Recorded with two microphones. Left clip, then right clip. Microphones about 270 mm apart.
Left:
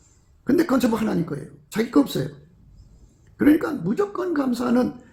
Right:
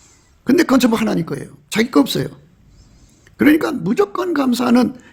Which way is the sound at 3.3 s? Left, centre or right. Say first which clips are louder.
Right 5 dB; right.